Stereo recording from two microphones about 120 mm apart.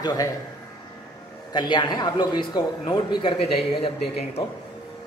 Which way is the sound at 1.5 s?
40° left (ahead or behind).